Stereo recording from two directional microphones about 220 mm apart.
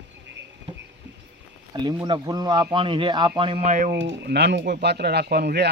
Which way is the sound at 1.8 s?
15° right (ahead or behind).